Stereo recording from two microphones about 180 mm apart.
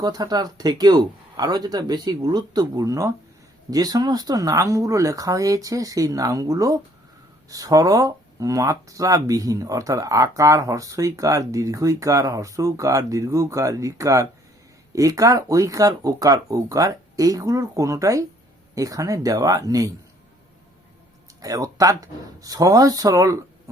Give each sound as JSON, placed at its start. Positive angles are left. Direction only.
{"t": 0.0, "sound": "speech", "side_deg": -20}
{"t": 21.4, "sound": "speech", "side_deg": -20}